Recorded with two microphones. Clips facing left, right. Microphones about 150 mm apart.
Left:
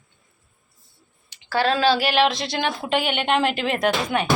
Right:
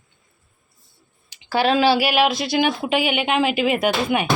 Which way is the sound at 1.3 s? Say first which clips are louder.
Right 2 dB; 15° right (ahead or behind).